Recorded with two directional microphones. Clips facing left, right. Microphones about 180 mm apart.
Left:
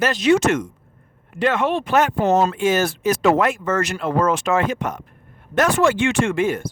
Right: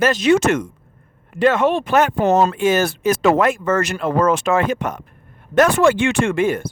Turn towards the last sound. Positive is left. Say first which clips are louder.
# right 2 dB
turn(degrees=-55)  # may be behind; listen again after turning